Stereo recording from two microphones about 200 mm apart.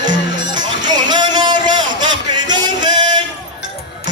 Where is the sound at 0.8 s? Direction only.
20° right (ahead or behind).